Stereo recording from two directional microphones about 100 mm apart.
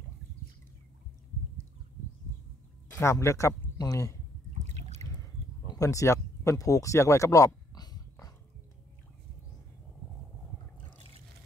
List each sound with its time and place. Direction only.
3.0 s speech: 30° left (ahead or behind)
5.0 s boat: 40° left (ahead or behind)
5.8 s a sound: 30° left (ahead or behind)